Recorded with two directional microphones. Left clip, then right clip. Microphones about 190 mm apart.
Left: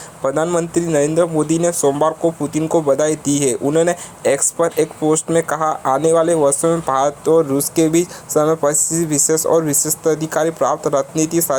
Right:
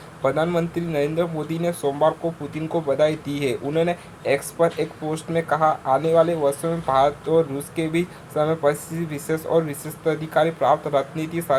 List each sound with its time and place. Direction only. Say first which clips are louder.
0.2 s speech: left 4 dB; 30° left (ahead or behind)